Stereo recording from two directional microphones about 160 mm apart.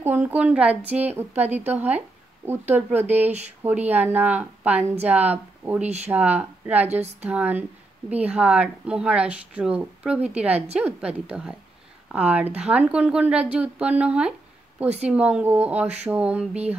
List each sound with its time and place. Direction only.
0.0 s speech: 10° right (ahead or behind)
3.3 s speech: 45° right (ahead or behind)
3.6 s speech: 10° right (ahead or behind)